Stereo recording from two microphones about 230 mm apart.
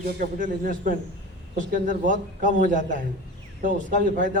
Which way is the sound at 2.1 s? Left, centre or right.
Right.